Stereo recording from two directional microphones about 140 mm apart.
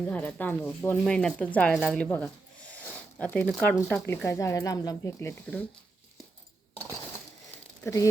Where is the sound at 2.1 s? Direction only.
10° left (ahead or behind).